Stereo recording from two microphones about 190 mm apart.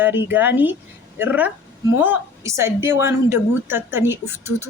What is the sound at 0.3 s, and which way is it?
A woman's voice, 10° right (ahead or behind).